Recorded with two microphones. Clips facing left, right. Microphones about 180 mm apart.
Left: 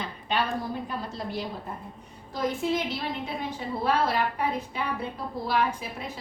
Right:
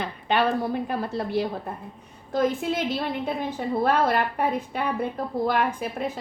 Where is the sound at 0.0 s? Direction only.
60° right (ahead or behind).